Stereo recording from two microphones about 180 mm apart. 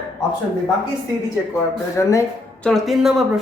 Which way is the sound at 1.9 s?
15° left (ahead or behind).